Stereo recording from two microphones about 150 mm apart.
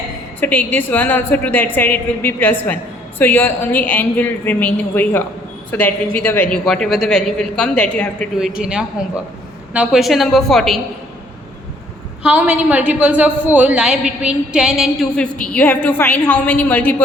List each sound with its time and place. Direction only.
0.3 s a woman's voice: 10° left (ahead or behind)
8.4 s speech: 5° right (ahead or behind)
12.2 s a woman's voice: 10° right (ahead or behind); by 17.0 s 10° left (ahead or behind)